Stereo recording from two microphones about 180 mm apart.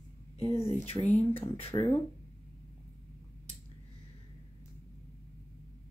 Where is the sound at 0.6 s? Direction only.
35° left (ahead or behind).